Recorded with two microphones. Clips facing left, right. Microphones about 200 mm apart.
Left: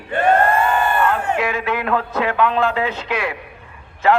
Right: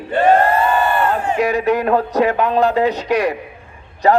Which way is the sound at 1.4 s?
40° right (ahead or behind).